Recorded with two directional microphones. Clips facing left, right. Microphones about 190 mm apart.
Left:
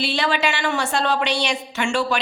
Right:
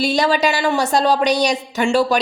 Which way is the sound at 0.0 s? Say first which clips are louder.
Right 5 dB; 40° right (ahead or behind).